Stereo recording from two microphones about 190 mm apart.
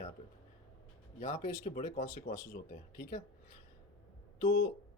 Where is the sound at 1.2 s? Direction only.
40° left (ahead or behind).